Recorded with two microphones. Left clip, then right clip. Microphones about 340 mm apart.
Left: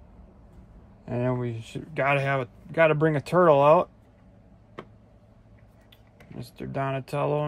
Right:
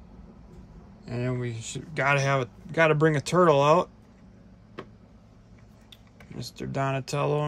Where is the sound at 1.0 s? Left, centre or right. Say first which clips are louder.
Left 4 dB; centre.